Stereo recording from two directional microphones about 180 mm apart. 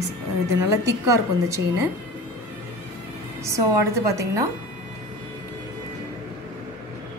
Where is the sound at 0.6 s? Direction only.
20° right (ahead or behind).